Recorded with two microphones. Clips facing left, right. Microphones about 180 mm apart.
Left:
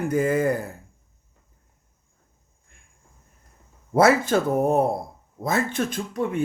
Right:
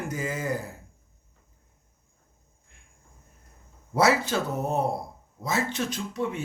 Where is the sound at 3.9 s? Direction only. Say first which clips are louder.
Left 5 dB; 50° left (ahead or behind).